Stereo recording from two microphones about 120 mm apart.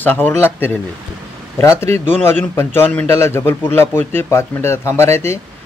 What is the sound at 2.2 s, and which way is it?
A man's voice, 20° left (ahead or behind).